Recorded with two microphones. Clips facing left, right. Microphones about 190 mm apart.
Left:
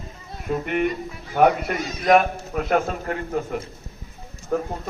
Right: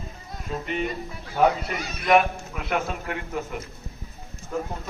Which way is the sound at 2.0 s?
40° left (ahead or behind).